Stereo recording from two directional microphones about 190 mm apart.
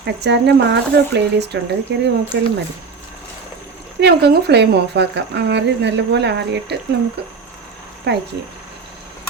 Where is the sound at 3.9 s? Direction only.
60° right (ahead or behind).